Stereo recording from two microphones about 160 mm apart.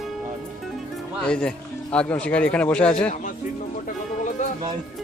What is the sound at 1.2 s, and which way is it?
Speech, 5° left (ahead or behind).